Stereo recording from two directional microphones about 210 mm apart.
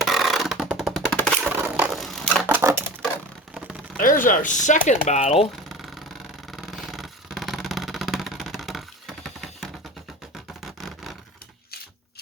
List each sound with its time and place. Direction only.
0.0 s vehicle: centre (ahead or behind)
1.5 s a sound: 10° right (ahead or behind)
2.5 s typewriter: 10° right (ahead or behind)
4.0 s speech: 40° left (ahead or behind)
6.5 s vehicle: centre (ahead or behind)
10.8 s a sound: centre (ahead or behind)